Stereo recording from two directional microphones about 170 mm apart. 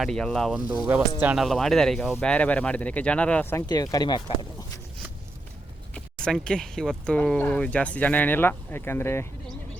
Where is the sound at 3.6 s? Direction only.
25° left (ahead or behind).